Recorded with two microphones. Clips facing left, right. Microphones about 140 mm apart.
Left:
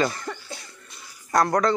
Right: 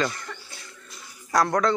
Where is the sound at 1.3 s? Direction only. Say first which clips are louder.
Left 1 dB; centre (ahead or behind).